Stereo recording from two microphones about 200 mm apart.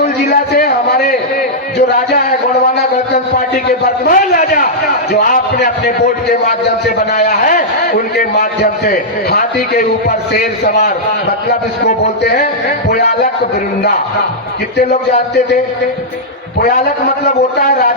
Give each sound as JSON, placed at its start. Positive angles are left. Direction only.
{"t": 0.0, "sound": "a sound", "side_deg": 50}
{"t": 4.0, "sound": "a man's voice", "side_deg": 45}
{"t": 7.1, "sound": "a man's voice", "side_deg": 40}
{"t": 16.6, "sound": "a man's voice", "side_deg": 50}